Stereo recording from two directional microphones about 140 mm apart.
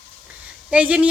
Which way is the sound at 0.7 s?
10° right (ahead or behind).